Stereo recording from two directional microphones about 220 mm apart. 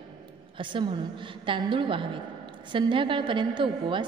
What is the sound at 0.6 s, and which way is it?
A woman's voice, 20° right (ahead or behind).